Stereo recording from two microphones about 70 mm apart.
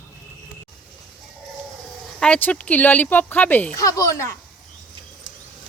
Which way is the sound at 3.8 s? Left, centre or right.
Left.